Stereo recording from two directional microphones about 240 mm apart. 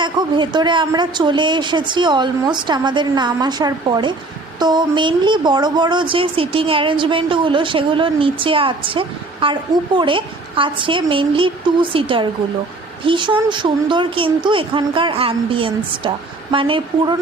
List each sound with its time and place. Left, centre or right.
0.0 s speech: centre